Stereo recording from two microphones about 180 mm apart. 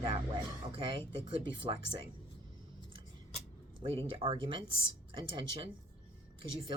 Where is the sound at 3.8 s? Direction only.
30° right (ahead or behind).